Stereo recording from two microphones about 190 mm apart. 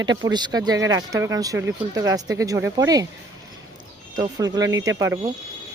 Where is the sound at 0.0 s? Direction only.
20° right (ahead or behind).